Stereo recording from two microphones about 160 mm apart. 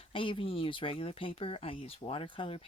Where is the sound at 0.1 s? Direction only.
35° left (ahead or behind).